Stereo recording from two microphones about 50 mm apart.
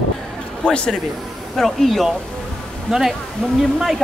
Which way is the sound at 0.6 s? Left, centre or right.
Centre.